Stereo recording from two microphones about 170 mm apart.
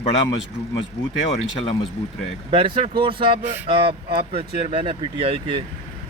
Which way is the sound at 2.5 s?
30° right (ahead or behind).